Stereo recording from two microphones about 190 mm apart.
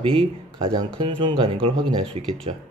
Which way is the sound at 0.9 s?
25° right (ahead or behind).